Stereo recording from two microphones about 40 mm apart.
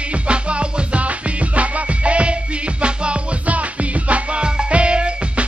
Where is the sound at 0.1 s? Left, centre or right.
Right.